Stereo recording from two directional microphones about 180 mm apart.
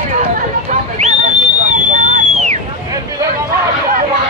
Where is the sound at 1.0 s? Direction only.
40° right (ahead or behind).